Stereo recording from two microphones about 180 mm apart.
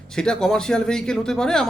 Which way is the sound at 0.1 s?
5° left (ahead or behind).